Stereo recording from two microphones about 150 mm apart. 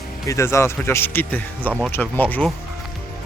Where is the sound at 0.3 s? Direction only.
20° left (ahead or behind).